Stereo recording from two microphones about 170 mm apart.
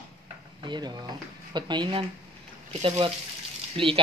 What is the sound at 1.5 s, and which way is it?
Speech, 25° right (ahead or behind).